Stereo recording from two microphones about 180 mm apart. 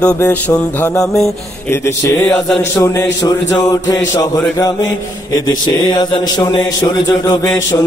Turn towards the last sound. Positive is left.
turn(degrees=20)  # may be behind; listen again after turning